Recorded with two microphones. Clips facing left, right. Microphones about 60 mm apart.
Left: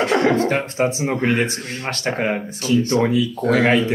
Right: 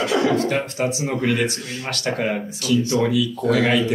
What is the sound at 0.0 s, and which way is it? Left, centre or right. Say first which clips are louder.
Speech: left 2 dB; left.